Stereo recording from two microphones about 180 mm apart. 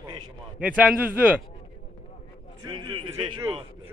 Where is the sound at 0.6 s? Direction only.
5° right (ahead or behind).